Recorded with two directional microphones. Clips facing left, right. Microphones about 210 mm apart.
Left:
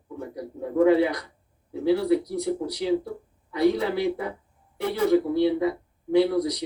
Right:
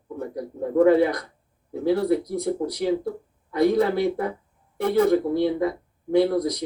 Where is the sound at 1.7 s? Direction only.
50° right (ahead or behind).